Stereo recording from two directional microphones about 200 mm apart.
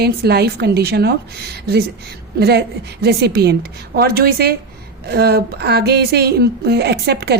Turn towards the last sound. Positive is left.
turn(degrees=-55)  # may be behind; listen again after turning